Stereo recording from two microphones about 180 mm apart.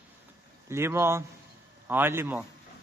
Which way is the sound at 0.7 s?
15° right (ahead or behind).